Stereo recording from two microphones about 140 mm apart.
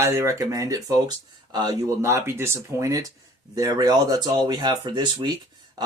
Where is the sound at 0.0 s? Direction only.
20° right (ahead or behind).